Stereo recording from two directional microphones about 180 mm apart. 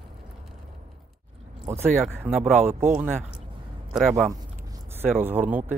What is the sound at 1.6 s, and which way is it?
Speech, 15° right (ahead or behind).